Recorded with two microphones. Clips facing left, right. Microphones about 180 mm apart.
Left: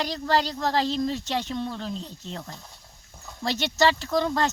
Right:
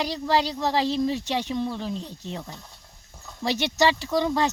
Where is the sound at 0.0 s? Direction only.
10° right (ahead or behind).